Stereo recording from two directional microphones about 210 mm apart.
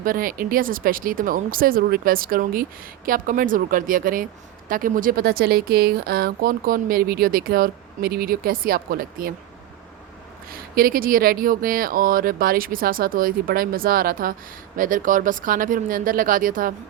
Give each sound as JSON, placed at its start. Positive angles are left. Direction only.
{"t": 0.0, "sound": "speech", "side_deg": -40}
{"t": 10.5, "sound": "speech", "side_deg": -45}